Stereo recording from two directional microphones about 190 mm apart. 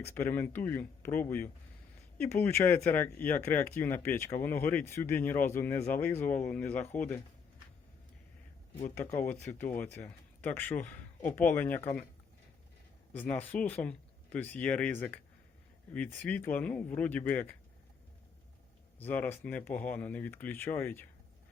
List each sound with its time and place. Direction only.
0.0 s speech: 10° left (ahead or behind)
9.0 s speech: 10° left (ahead or behind)
13.1 s speech: 10° left (ahead or behind)
18.9 s speech: 10° left (ahead or behind)